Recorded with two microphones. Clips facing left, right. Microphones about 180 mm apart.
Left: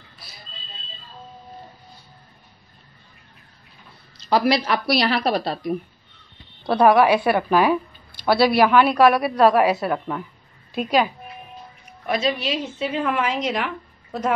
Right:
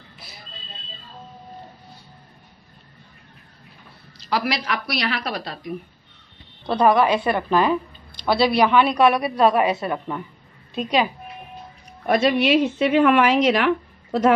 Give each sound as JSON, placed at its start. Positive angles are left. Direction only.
{"t": 4.3, "sound": "a woman's voice", "side_deg": 30}
{"t": 6.6, "sound": "a woman's voice", "side_deg": 5}
{"t": 12.1, "sound": "a woman's voice", "side_deg": -60}